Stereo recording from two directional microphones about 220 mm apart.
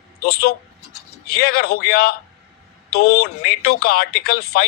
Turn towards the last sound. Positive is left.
turn(degrees=45)  # may be behind; listen again after turning